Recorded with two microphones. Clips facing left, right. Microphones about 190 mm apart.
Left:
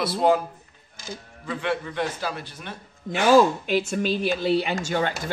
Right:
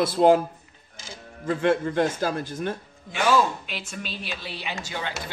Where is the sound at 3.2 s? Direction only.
45° left (ahead or behind).